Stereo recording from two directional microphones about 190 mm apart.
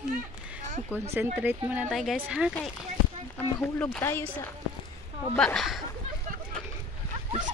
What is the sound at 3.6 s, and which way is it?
Speech, 10° left (ahead or behind).